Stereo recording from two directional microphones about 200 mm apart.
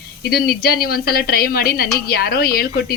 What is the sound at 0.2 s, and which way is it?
Speech, 50° left (ahead or behind).